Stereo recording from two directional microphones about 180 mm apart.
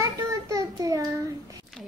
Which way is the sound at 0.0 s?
20° right (ahead or behind).